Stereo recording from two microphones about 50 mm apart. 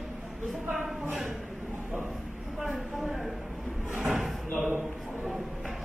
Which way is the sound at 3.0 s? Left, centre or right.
Centre.